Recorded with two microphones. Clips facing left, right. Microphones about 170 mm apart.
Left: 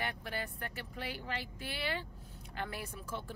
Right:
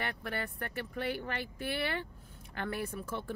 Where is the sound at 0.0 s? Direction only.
60° right (ahead or behind).